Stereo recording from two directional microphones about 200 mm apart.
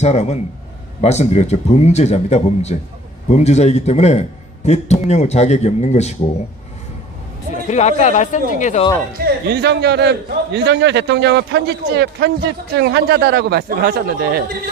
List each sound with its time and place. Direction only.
0.0 s a man's voice: 35° left (ahead or behind)
7.5 s a man's voice: 35° left (ahead or behind)
9.2 s a man's voice: 55° right (ahead or behind)